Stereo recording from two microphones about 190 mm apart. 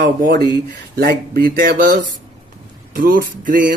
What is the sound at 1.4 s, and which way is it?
Speech, 50° right (ahead or behind).